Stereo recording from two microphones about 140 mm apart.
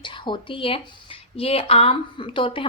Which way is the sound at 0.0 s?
35° left (ahead or behind).